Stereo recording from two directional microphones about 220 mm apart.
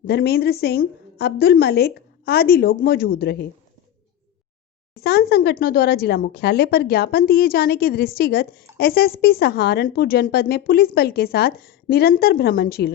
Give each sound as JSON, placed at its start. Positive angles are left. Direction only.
{"t": 0.1, "sound": "a woman's voice", "side_deg": 45}
{"t": 4.9, "sound": "a woman's voice", "side_deg": 45}